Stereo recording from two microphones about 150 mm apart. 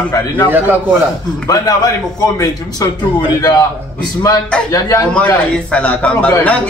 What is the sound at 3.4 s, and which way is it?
Speech, 25° left (ahead or behind).